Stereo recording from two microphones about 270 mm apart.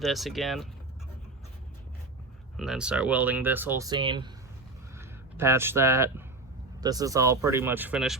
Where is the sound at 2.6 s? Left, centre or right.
Centre.